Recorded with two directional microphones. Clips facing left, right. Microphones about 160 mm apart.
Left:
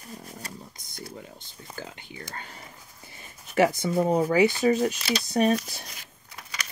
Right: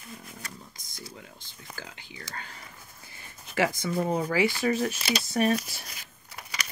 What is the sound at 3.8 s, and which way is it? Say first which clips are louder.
Speech: left 4 dB; 30° left (ahead or behind).